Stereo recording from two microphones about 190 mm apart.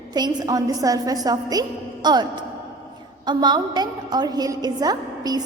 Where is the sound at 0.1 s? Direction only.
20° right (ahead or behind).